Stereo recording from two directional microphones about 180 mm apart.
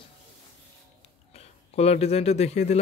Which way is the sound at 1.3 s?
35° left (ahead or behind).